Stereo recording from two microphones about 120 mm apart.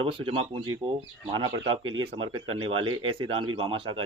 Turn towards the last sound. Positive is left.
turn(degrees=-45)  # may be behind; listen again after turning